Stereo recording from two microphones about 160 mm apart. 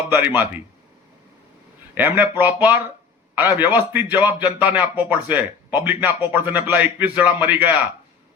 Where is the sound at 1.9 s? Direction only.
10° right (ahead or behind).